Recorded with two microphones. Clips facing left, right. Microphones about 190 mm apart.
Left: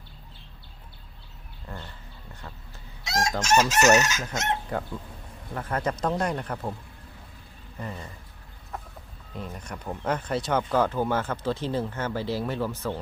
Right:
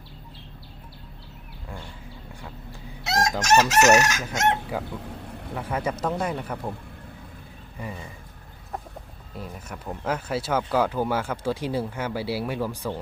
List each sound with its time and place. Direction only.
3.1 s chicken: 70° right (ahead or behind)
4.7 s speech: 5° right (ahead or behind)
7.8 s speech: 10° right (ahead or behind)
8.7 s chicken: 35° right (ahead or behind)
9.3 s speech: 5° right (ahead or behind)